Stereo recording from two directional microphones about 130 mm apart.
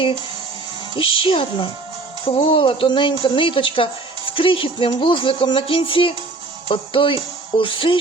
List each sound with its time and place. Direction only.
0.9 s a woman's voice: 45° left (ahead or behind)